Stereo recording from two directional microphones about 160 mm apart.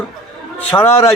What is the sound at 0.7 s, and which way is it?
Speech, 10° left (ahead or behind).